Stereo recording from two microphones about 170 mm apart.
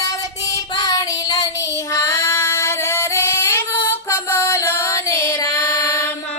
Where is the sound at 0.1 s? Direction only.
20° left (ahead or behind).